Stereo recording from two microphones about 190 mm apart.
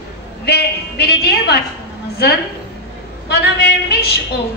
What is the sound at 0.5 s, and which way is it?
A woman's voice, 60° left (ahead or behind).